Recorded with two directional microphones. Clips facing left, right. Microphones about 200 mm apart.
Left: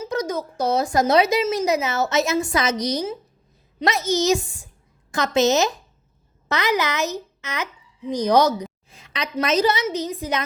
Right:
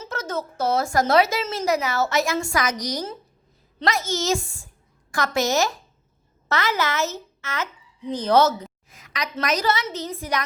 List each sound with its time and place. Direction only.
0.0 s a child's voice: 15° left (ahead or behind)
8.9 s a sound: 30° left (ahead or behind)
9.4 s speech: 25° left (ahead or behind)